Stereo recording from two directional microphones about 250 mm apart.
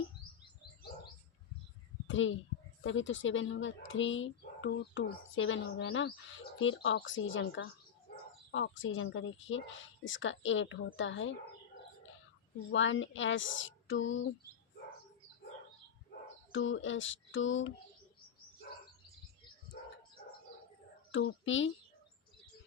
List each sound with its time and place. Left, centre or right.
2.0 s a child's voice: left
12.7 s speech: left
16.5 s speech: left
21.1 s speech: left